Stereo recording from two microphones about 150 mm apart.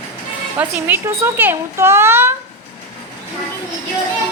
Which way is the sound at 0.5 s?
10° right (ahead or behind).